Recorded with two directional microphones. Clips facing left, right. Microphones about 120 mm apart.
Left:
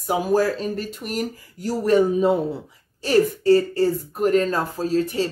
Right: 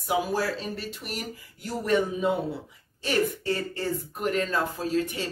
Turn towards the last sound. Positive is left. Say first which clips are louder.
# left 6 dB
turn(degrees=35)  # may be behind; listen again after turning